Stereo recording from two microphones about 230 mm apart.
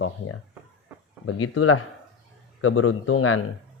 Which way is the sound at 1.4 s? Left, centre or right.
Left.